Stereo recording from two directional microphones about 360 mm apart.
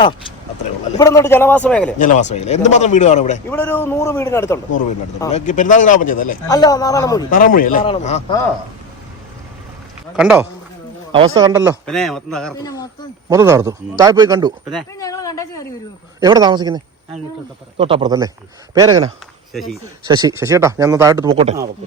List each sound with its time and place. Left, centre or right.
0.9 s a man's voice: centre
2.0 s speech: left
3.5 s a man's voice: centre
5.2 s speech: centre
6.5 s a man's voice: centre
7.3 s speech: left
10.2 s a man's voice: centre
13.3 s a man's voice: centre
14.7 s a man's voice: centre
16.2 s a man's voice: centre
19.5 s a man's voice: centre
20.1 s a man's voice: centre